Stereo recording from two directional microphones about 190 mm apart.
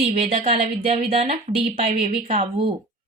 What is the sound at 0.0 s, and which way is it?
A woman's voice, 35° right (ahead or behind).